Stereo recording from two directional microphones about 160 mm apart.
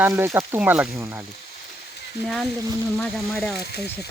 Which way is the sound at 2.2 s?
Centre (ahead or behind).